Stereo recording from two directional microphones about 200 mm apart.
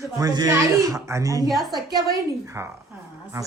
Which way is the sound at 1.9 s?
15° right (ahead or behind).